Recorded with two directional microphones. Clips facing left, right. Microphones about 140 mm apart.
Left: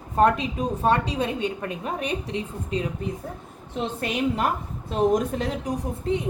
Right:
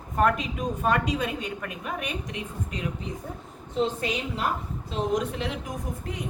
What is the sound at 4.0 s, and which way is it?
A woman's voice, 55° left (ahead or behind).